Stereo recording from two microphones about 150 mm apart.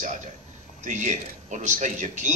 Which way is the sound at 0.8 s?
55° right (ahead or behind).